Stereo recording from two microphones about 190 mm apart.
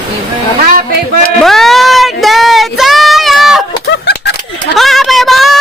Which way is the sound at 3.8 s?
60° left (ahead or behind).